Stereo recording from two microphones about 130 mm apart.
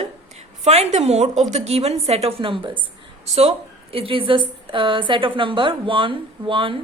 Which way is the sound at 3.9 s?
45° right (ahead or behind).